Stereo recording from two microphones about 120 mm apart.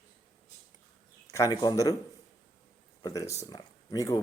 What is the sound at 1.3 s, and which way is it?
Speech, 30° left (ahead or behind).